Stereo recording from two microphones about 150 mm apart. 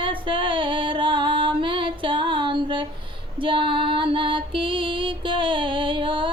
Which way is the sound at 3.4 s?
35° right (ahead or behind).